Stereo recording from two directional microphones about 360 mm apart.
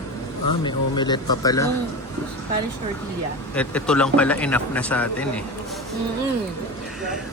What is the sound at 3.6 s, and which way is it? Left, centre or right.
Speech, centre.